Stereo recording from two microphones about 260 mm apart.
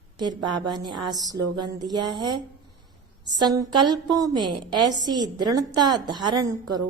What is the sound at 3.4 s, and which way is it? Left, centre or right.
A woman's voice, centre.